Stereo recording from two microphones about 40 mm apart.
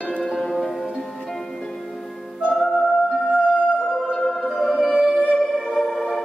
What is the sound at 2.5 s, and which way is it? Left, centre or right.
Music, centre.